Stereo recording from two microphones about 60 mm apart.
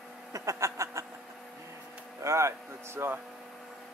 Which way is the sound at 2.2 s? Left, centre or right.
Right.